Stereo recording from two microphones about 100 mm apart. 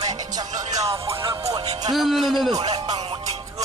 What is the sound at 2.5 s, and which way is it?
Speech, 45° right (ahead or behind).